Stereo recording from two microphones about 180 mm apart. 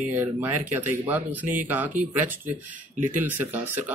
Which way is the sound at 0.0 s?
10° right (ahead or behind).